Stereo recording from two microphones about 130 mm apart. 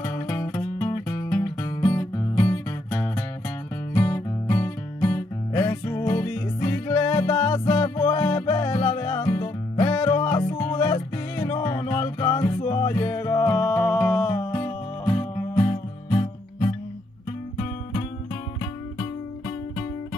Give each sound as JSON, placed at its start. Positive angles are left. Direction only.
{"t": 0.1, "sound": "music", "side_deg": 20}
{"t": 13.5, "sound": "music", "side_deg": 15}
{"t": 14.3, "sound": "music", "side_deg": 25}
{"t": 16.2, "sound": "music", "side_deg": 35}